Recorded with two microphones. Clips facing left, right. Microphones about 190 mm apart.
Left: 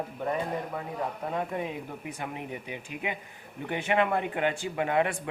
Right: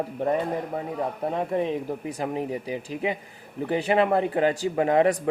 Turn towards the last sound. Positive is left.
turn(degrees=-35)  # may be behind; listen again after turning